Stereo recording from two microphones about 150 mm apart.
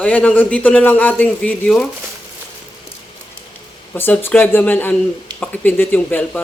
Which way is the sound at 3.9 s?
15° left (ahead or behind).